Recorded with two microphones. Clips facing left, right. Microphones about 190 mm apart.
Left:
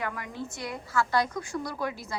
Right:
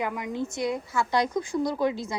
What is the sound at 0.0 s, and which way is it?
A woman's voice, 15° right (ahead or behind).